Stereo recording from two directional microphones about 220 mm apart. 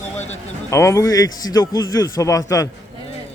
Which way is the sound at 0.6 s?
15° left (ahead or behind).